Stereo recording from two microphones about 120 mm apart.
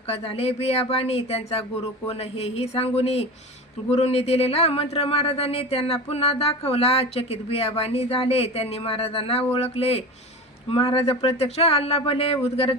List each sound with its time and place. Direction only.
0.1 s speech: 60° left (ahead or behind)